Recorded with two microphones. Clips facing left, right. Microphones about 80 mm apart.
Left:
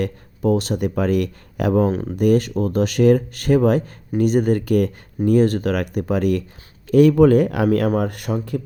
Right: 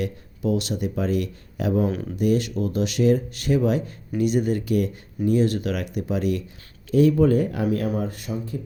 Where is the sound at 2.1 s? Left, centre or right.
Left.